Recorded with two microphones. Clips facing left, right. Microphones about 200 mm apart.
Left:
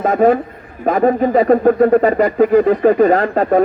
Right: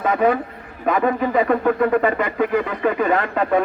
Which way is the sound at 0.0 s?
45° left (ahead or behind).